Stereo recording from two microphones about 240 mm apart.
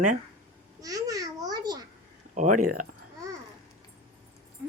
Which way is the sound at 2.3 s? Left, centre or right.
Right.